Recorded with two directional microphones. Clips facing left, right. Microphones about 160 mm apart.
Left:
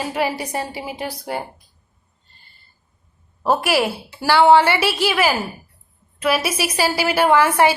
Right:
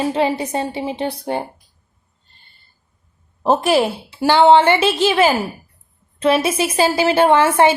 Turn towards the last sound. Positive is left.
turn(degrees=-25)  # may be behind; listen again after turning